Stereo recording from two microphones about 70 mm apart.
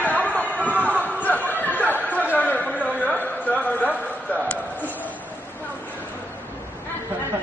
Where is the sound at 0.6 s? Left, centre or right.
Right.